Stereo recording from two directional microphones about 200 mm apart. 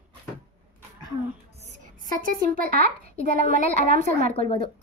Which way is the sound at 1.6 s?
40° right (ahead or behind).